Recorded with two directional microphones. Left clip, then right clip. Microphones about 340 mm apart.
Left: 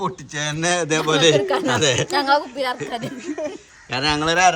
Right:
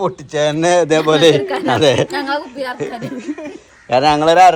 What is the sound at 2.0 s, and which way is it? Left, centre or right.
Speech, left.